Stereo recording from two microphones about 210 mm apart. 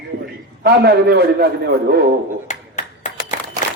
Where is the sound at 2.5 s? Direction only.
35° left (ahead or behind).